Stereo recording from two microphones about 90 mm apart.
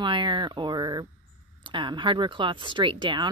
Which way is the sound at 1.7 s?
60° right (ahead or behind).